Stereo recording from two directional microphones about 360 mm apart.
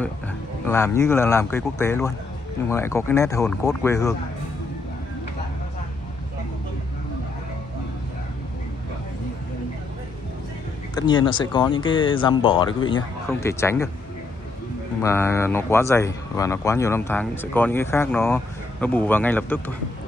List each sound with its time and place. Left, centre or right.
0.7 s speech: centre
11.0 s speech: centre
15.0 s speech: centre